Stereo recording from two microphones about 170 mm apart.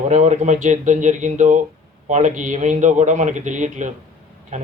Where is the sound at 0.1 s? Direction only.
45° right (ahead or behind).